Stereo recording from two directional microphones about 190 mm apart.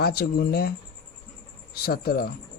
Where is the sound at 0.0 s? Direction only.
55° left (ahead or behind).